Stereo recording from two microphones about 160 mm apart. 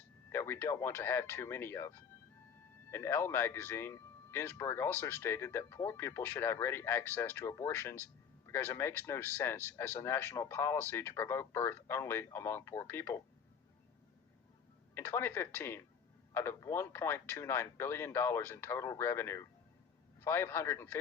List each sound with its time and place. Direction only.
0.3 s speech: 15° left (ahead or behind)
2.9 s speech: 15° left (ahead or behind)
14.9 s speech: 15° left (ahead or behind)